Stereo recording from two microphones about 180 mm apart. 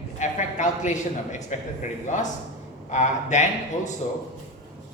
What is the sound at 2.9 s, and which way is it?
A man's voice, 40° left (ahead or behind).